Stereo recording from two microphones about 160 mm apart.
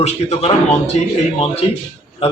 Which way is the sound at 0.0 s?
45° left (ahead or behind).